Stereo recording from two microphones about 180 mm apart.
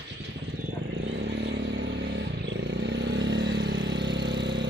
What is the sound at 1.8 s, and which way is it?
Vehicle, 90° right.